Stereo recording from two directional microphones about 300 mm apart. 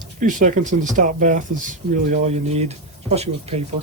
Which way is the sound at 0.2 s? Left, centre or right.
Right.